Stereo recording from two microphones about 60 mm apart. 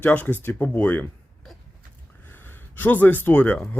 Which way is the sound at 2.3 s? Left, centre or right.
Left.